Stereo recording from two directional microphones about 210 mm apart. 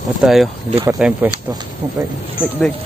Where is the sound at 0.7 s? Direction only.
20° right (ahead or behind).